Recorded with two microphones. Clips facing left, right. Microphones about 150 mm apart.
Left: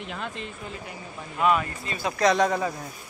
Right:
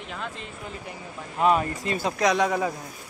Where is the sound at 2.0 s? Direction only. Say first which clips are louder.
Left 2 dB; 10° right (ahead or behind).